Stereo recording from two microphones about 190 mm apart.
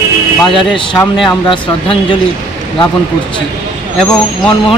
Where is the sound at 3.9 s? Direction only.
5° left (ahead or behind).